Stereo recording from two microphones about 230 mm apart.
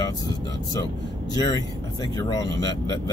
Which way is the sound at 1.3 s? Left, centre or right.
Centre.